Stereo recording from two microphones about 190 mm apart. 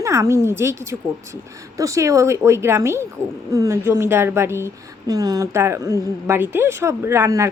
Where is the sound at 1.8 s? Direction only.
15° right (ahead or behind).